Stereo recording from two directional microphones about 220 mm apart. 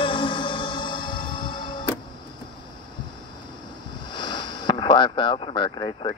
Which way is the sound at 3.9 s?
20° left (ahead or behind).